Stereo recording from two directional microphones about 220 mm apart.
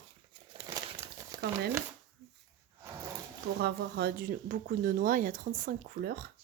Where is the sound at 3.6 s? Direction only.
50° right (ahead or behind).